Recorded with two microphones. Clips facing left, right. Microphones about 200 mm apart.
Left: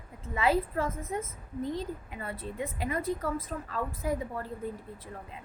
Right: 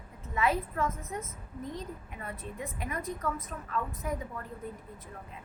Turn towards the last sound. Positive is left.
turn(degrees=30)  # may be behind; listen again after turning